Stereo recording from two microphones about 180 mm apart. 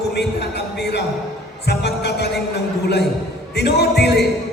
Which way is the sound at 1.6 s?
70° left (ahead or behind).